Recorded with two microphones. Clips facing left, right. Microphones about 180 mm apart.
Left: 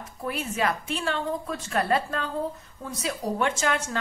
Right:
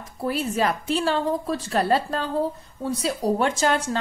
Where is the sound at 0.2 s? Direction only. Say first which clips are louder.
Right 4 dB; 35° right (ahead or behind).